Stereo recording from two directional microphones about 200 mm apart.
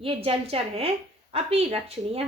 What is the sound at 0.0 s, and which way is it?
A woman's voice, 30° right (ahead or behind).